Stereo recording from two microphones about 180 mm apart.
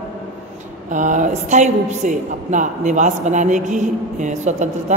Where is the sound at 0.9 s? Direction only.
45° right (ahead or behind).